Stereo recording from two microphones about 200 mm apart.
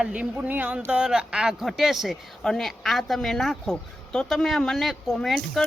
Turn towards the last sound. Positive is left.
turn(degrees=0)  # may be behind; listen again after turning